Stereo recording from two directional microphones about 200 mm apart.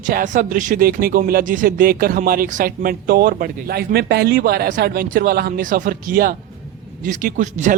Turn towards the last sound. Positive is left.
turn(degrees=-40)  # may be behind; listen again after turning